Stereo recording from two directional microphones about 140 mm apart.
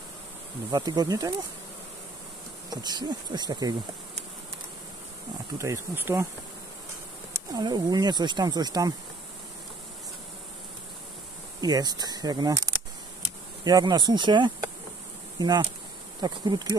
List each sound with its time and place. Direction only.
0.7 s speech: 30° right (ahead or behind)
2.7 s speech: 30° right (ahead or behind)
5.6 s speech: 20° right (ahead or behind)
7.3 s speech: 30° right (ahead or behind)
11.6 s speech: 30° right (ahead or behind)
15.3 s insect: 30° right (ahead or behind)
16.2 s speech: 30° right (ahead or behind)